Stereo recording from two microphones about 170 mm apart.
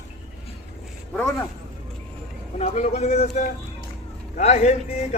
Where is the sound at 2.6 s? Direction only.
40° left (ahead or behind).